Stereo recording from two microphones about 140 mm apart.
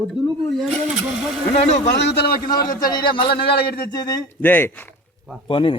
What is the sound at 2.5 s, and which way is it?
A man's voice, 30° left (ahead or behind).